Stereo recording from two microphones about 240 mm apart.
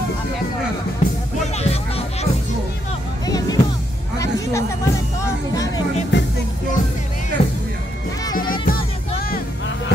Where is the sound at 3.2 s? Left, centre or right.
Centre.